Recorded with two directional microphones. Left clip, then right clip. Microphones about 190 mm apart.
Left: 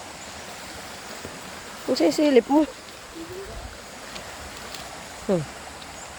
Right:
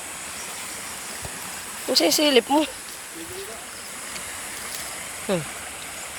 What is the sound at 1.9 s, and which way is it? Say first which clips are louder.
Speech: right 1 dB; 30° left (ahead or behind).